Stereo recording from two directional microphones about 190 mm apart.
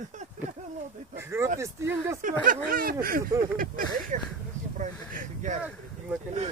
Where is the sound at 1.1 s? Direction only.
15° right (ahead or behind).